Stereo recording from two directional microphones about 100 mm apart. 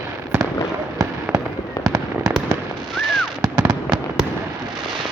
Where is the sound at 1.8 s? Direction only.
35° right (ahead or behind).